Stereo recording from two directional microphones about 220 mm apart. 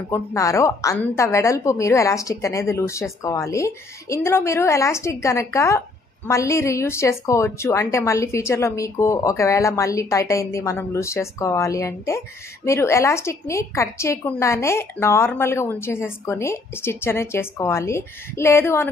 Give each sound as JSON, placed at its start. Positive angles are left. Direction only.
{"t": 0.1, "sound": "a woman's voice", "side_deg": 15}